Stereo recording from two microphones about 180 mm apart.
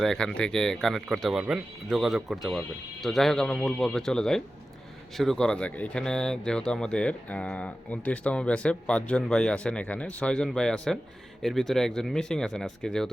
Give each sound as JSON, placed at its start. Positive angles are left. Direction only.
{"t": 0.0, "sound": "speech", "side_deg": 0}